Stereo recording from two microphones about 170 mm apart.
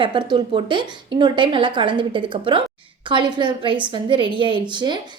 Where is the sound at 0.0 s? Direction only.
30° right (ahead or behind).